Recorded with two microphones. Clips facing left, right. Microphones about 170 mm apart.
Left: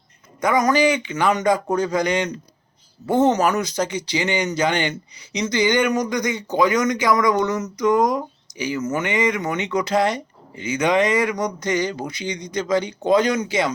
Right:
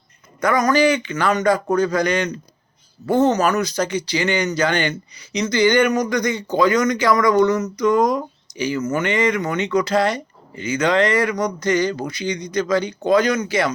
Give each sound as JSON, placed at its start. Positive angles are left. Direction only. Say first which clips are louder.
{"t": 0.4, "sound": "speech", "louder": "right 1 dB", "side_deg": 20}